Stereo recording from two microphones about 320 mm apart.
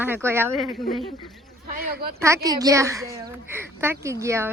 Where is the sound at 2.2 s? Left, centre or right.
Centre.